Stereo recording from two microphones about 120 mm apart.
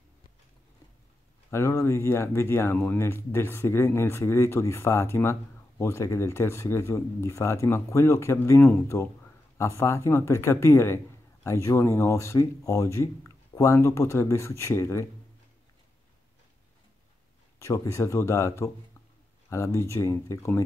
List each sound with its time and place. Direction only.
1.5 s speech: 20° left (ahead or behind)
17.6 s speech: 25° left (ahead or behind)